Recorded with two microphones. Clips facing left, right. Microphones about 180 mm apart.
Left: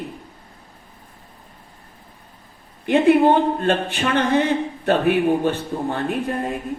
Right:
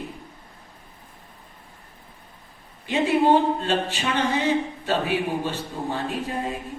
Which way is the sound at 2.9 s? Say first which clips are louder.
Left 5 dB; 55° left (ahead or behind).